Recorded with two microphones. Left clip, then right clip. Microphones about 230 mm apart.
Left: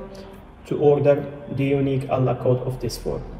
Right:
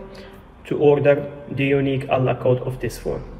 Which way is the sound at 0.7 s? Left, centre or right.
Right.